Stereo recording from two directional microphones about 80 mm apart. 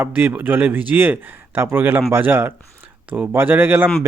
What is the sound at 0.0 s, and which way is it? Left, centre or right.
Speech, right.